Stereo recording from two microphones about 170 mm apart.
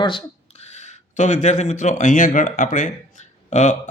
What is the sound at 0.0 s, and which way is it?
Speech, 30° left (ahead or behind).